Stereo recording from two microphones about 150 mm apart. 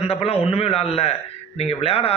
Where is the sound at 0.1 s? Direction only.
40° left (ahead or behind).